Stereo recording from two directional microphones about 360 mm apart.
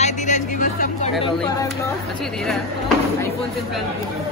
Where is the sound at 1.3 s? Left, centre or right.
Centre.